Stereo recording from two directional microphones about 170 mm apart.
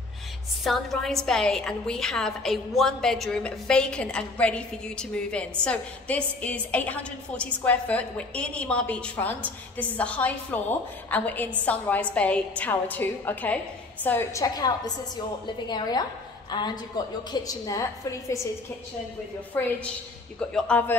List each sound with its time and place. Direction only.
0.7 s a woman's voice: centre (ahead or behind); by 17.8 s 20° left (ahead or behind)
19.6 s a woman's voice: 10° left (ahead or behind)